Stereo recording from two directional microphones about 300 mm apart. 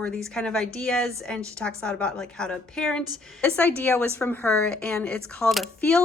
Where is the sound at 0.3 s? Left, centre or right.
Centre.